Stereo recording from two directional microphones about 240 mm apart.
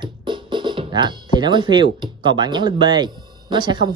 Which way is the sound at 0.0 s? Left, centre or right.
Centre.